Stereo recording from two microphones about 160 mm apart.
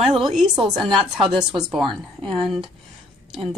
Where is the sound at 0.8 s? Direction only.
30° right (ahead or behind).